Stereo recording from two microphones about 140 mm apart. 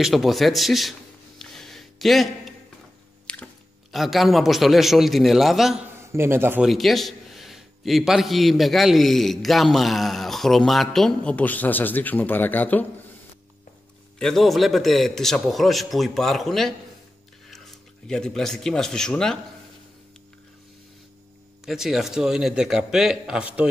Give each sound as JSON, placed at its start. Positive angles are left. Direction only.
{"t": 0.0, "sound": "a man's voice", "side_deg": 0}
{"t": 1.4, "sound": "a sound", "side_deg": 5}
{"t": 3.9, "sound": "a man's voice", "side_deg": 0}
{"t": 6.1, "sound": "a man's voice", "side_deg": -15}
{"t": 6.6, "sound": "a man's voice", "side_deg": 0}
{"t": 14.1, "sound": "a man's voice", "side_deg": 5}
{"t": 21.6, "sound": "a man's voice", "side_deg": 0}